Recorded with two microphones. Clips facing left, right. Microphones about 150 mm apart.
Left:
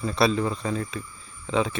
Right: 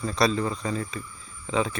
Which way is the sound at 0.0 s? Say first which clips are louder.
Left 1 dB; centre (ahead or behind).